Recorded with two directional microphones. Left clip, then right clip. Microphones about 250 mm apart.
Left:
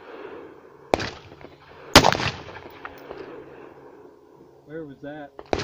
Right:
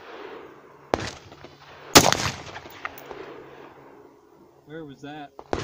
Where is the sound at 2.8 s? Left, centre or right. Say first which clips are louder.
Right 5 dB; centre.